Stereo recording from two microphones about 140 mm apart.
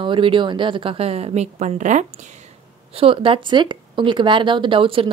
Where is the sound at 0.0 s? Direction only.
35° right (ahead or behind); by 2.0 s 60° right (ahead or behind).